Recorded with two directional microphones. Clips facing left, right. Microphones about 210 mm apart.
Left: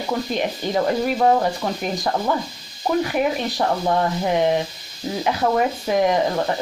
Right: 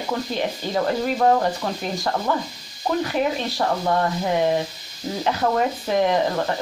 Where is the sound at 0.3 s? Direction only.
15° left (ahead or behind).